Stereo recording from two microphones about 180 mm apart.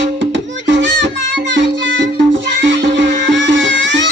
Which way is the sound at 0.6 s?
90° right.